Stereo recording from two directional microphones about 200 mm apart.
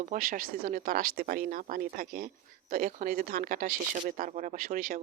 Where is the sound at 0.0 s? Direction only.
40° right (ahead or behind).